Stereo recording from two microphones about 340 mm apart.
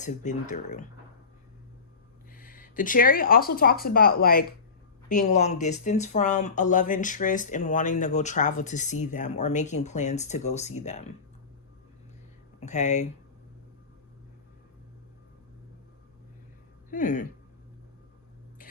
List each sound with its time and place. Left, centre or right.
0.0 s speech: left
2.3 s speech: left
12.5 s speech: left
16.9 s speech: left